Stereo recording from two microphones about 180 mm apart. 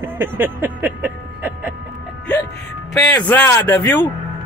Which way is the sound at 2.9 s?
5° left (ahead or behind).